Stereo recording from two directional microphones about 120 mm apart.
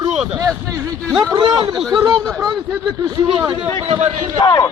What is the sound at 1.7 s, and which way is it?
Speech, centre (ahead or behind).